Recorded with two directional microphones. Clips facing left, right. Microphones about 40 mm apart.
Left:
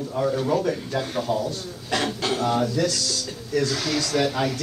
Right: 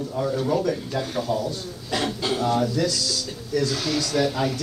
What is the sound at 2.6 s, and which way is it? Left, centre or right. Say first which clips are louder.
Speech: even; left.